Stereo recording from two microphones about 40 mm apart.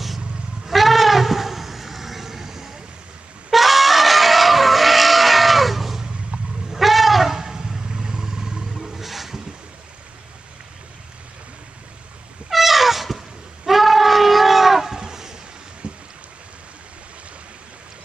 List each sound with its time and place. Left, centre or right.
0.7 s shofar: centre
3.5 s a sound: centre
7.3 s vehicle: centre
8.7 s wild animals: centre
12.4 s cat: centre
13.7 s a sound: centre
15.8 s boat: right